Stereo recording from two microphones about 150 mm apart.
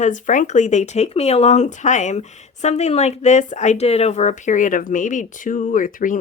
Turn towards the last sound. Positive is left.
turn(degrees=65)  # may be behind; listen again after turning